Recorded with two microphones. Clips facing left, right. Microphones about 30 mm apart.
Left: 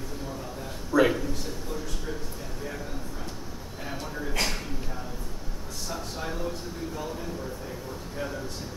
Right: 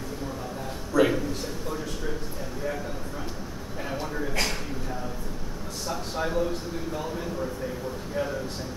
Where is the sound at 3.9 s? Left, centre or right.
Centre.